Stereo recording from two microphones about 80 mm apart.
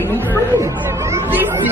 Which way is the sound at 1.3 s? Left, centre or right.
Right.